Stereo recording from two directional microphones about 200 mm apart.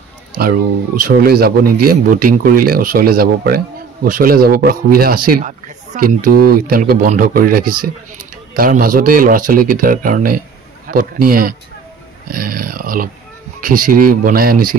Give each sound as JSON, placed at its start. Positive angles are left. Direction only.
{"t": 0.4, "sound": "speech", "side_deg": -45}